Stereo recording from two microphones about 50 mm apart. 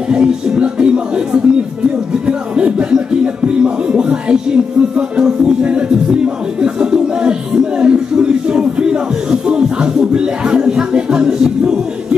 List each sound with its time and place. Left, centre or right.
0.1 s speech: right
3.4 s music: centre